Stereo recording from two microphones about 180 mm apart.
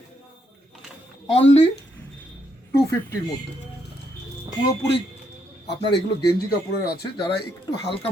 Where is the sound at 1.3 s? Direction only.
35° left (ahead or behind).